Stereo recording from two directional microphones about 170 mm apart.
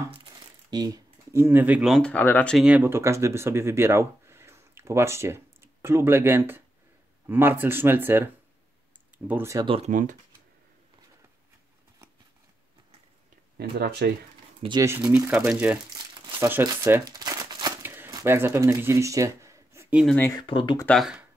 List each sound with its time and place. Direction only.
0.1 s a sound: 25° right (ahead or behind); by 2.0 s 5° right (ahead or behind)
2.0 s speech: 10° left (ahead or behind); by 8.3 s 10° right (ahead or behind)
9.3 s speech: 15° right (ahead or behind)
9.7 s speech: 40° right (ahead or behind)
13.6 s speech: 70° right (ahead or behind)
14.8 s speech: 15° right (ahead or behind)
16.6 s shuffling cards: 20° right (ahead or behind)
17.9 s speech: 15° right (ahead or behind)
20.2 s speech: 15° left (ahead or behind)
20.4 s speech: 30° left (ahead or behind)
20.8 s speech: centre (ahead or behind)